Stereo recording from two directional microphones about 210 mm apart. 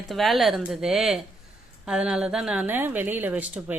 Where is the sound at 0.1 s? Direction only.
Centre (ahead or behind).